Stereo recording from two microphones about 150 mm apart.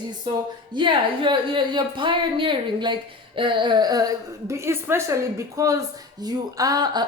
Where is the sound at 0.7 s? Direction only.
30° right (ahead or behind).